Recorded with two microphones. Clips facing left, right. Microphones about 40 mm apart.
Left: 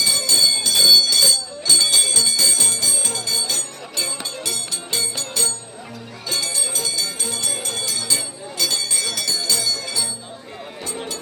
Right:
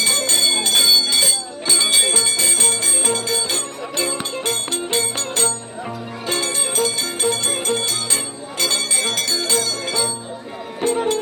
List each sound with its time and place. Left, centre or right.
0.0 s bell: right
6.2 s music: right